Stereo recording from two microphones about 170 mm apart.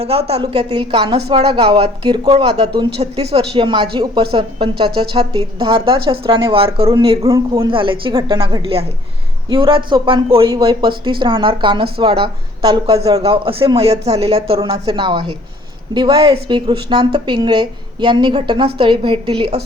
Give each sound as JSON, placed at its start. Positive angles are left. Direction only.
{"t": 0.0, "sound": "a woman's voice", "side_deg": -35}
{"t": 7.3, "sound": "a woman's voice", "side_deg": -20}
{"t": 7.7, "sound": "a woman's voice", "side_deg": -30}